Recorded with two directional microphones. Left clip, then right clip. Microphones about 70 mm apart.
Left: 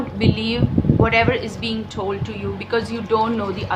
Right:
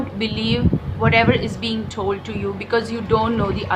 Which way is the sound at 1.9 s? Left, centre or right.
Right.